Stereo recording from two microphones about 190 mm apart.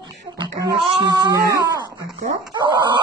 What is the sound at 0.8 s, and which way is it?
Wail, 20° right (ahead or behind).